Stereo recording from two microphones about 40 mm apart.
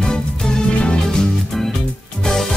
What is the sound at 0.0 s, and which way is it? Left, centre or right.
Music, centre.